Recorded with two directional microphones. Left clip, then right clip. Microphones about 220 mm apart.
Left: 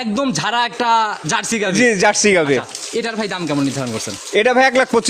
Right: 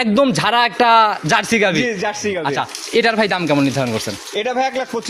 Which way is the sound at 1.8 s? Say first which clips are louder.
Left 7 dB; 50° left (ahead or behind).